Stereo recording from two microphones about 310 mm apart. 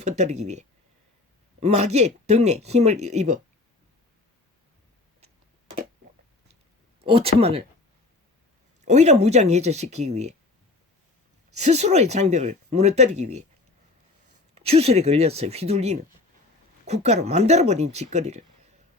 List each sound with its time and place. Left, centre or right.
0.0 s speech: right
1.6 s speech: right
7.0 s speech: centre
8.8 s speech: right
11.5 s speech: right
14.5 s speech: centre